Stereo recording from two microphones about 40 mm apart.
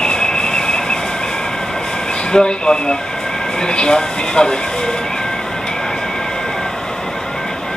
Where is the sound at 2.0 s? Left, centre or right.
Centre.